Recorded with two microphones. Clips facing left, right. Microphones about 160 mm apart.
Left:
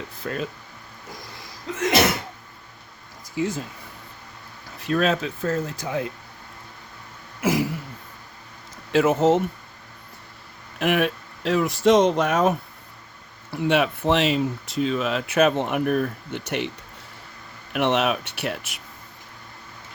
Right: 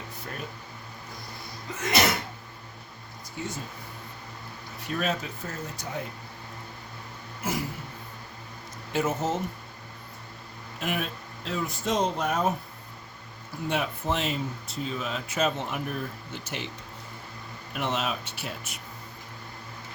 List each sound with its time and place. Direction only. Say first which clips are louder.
0.2 s speech: left 11 dB; 90° left
3.4 s speech: left 10 dB; 90° left
4.8 s speech: left 8 dB; 90° left
7.4 s throat clearing: left 9 dB; 90° left
8.9 s speech: left 10 dB; 85° left
10.8 s speech: left 10 dB; 75° left (ahead or behind); by 12.5 s 90° left
13.5 s speech: left 8 dB; 75° left (ahead or behind)
17.7 s speech: left 8 dB; 70° left (ahead or behind)